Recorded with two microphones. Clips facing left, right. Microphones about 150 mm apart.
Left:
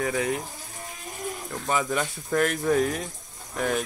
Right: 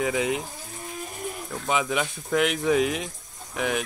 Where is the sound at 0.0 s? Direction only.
15° right (ahead or behind).